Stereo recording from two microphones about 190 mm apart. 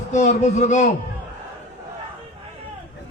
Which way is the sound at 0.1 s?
40° left (ahead or behind).